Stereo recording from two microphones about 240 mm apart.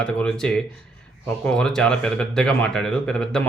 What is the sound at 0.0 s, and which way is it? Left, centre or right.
Speech, centre.